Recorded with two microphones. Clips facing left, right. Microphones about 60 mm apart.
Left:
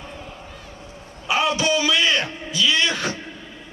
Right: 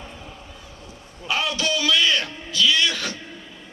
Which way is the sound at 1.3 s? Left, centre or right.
Left.